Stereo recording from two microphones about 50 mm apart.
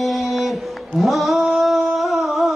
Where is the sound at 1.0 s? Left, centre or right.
Centre.